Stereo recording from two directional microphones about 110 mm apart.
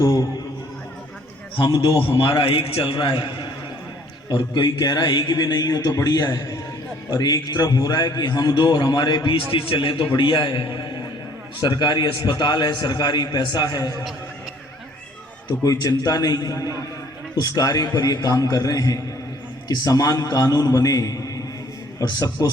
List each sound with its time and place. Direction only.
1.5 s a man's voice: 55° left (ahead or behind)
2.9 s a man's voice: 45° left (ahead or behind)
15.6 s a man's voice: 35° left (ahead or behind)